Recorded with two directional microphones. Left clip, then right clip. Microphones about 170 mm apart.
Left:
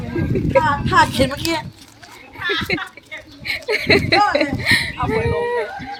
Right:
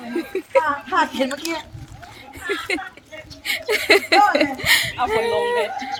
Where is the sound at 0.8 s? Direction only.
35° left (ahead or behind).